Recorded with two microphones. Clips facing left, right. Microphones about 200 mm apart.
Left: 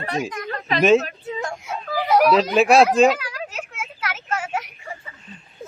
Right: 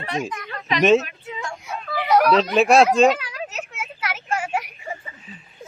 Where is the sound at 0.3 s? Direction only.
45° left (ahead or behind).